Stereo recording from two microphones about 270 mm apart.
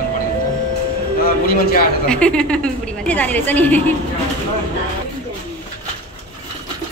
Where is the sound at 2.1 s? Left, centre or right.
Centre.